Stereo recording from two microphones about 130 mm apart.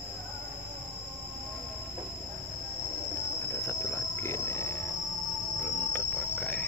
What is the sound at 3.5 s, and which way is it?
Cricket, 15° left (ahead or behind).